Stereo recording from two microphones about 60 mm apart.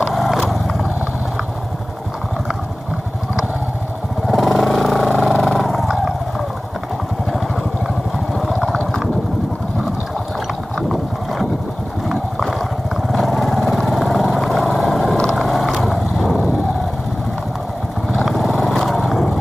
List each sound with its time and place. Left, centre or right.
0.1 s vehicle: centre
4.3 s vehicle: centre
8.4 s vehicle: centre
10.8 s clip-clop: centre
13.1 s vehicle: centre
18.1 s vehicle: centre